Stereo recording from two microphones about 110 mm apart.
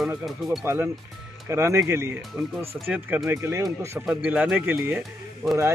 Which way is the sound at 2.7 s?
Centre (ahead or behind).